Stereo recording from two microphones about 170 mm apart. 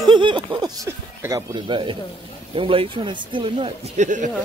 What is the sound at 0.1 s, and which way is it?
Speech, 25° right (ahead or behind).